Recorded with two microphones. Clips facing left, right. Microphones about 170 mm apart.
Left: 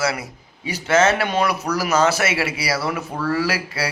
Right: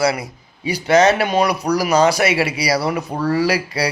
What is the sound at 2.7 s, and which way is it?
Speech, 35° right (ahead or behind).